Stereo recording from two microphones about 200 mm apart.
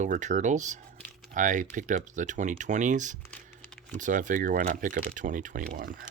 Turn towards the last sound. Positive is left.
turn(degrees=-40)  # may be behind; listen again after turning